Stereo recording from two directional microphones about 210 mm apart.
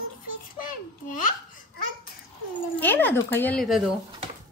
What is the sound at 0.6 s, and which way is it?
Speech, 40° left (ahead or behind).